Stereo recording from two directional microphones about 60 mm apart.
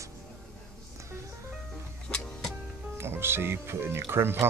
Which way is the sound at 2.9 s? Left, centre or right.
Right.